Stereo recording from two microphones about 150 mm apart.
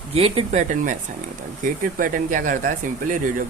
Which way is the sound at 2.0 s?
65° right (ahead or behind).